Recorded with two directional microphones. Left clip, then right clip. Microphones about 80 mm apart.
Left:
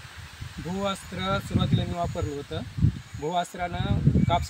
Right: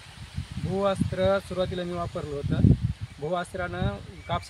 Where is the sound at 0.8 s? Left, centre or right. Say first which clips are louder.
Right 5 dB; right.